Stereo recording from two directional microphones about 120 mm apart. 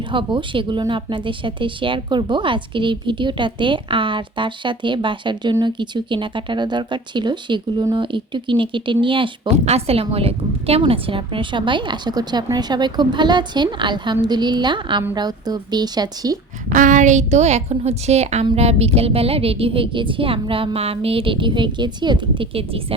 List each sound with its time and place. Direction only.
0.1 s a woman's voice: 40° right (ahead or behind)
9.6 s speech: 60° right (ahead or behind); by 16.4 s 35° right (ahead or behind)
16.6 s a woman's voice: 90° right; by 23.0 s 50° right (ahead or behind)